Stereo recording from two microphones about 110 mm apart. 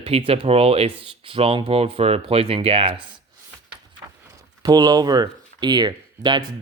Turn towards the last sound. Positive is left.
turn(degrees=-45)  # may be behind; listen again after turning